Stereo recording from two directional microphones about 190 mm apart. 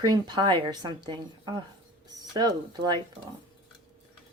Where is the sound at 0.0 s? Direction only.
20° right (ahead or behind).